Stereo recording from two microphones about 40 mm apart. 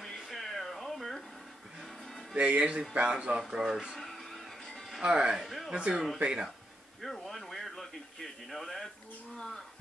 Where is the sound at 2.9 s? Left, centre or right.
Right.